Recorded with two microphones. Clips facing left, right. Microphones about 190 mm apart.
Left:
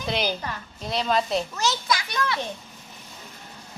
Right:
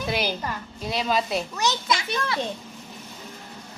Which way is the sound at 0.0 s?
5° right (ahead or behind).